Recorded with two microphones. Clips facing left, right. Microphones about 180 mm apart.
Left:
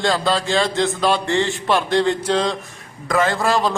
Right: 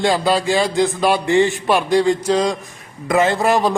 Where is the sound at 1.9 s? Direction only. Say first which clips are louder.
Right 4 dB; 10° right (ahead or behind).